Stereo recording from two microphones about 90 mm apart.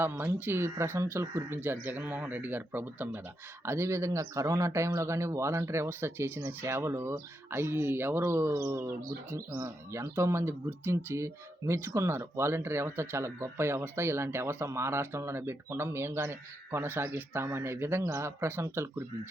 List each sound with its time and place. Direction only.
0.0 s speech: 25° right (ahead or behind)
3.7 s speech: 30° right (ahead or behind)